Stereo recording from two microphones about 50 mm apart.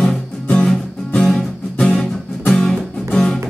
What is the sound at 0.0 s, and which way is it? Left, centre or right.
Music, centre.